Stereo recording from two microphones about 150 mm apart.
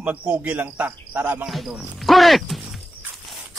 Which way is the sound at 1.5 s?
Centre (ahead or behind).